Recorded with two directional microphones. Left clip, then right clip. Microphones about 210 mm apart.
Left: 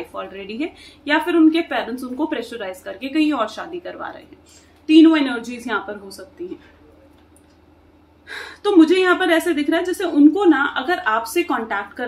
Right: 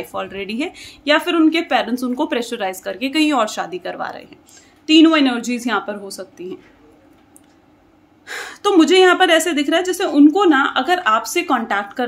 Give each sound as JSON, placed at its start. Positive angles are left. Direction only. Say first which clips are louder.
{"t": 0.1, "sound": "a woman's voice", "louder": "right 5 dB", "side_deg": -55}
{"t": 8.3, "sound": "a woman's voice", "louder": "right 3 dB", "side_deg": -50}